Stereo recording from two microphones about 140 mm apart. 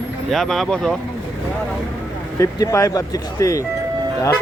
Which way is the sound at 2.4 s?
20° left (ahead or behind).